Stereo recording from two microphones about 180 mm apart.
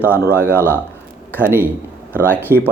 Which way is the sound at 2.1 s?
10° left (ahead or behind).